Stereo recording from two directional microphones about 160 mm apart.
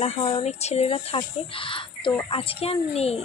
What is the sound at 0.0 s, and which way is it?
Speech, 40° left (ahead or behind).